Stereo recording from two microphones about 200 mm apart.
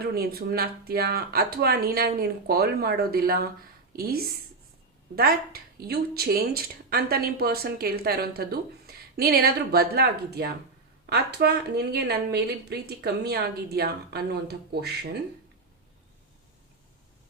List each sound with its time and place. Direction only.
0.0 s a woman's voice: 50° right (ahead or behind)